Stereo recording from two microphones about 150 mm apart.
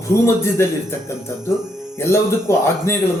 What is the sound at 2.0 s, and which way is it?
A man's voice, 15° left (ahead or behind).